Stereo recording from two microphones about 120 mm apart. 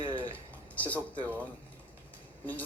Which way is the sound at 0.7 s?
10° left (ahead or behind).